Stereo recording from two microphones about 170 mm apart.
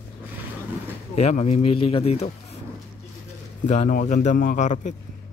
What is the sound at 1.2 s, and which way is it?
Speech, 40° left (ahead or behind).